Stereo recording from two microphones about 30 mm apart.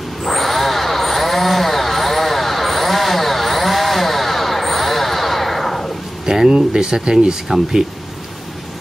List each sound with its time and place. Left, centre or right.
0.2 s vehicle: centre
6.2 s a sound: centre
6.5 s speech: right